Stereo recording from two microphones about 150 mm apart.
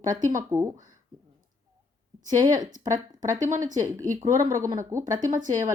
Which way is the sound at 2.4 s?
60° right (ahead or behind).